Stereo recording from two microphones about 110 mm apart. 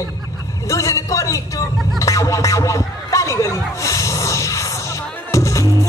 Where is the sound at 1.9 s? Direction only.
30° left (ahead or behind).